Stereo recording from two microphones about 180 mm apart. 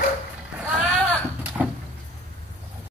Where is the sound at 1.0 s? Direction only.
10° left (ahead or behind).